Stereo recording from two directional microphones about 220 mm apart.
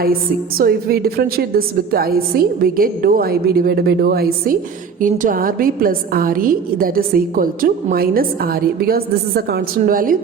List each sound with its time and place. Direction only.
0.6 s a woman's voice: 40° right (ahead or behind)